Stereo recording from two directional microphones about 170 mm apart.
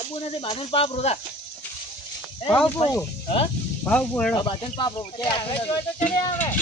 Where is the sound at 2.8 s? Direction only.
35° left (ahead or behind).